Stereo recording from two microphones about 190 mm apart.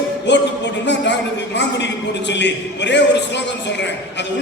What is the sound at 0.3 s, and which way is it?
A man's voice, 65° left (ahead or behind).